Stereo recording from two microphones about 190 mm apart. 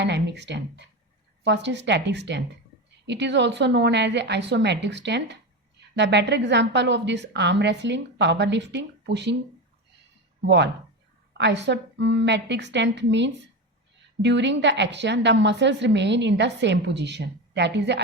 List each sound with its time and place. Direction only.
0.0 s a woman's voice: 65° right (ahead or behind)
10.4 s a woman's voice: 65° right (ahead or behind)